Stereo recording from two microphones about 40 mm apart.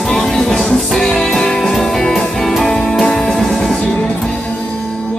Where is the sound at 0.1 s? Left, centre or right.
Centre.